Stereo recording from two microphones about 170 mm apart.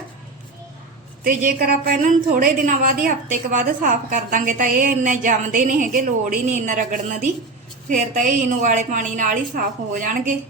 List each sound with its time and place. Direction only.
1.2 s a woman's voice: 55° right (ahead or behind)